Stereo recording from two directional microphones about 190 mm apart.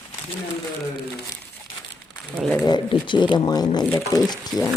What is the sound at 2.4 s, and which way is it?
Speech, centre (ahead or behind).